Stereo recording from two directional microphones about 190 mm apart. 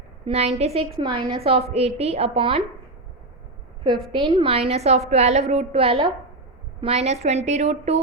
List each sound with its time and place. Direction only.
0.3 s a woman's voice: 35° right (ahead or behind)
4.1 s a woman's voice: 30° right (ahead or behind)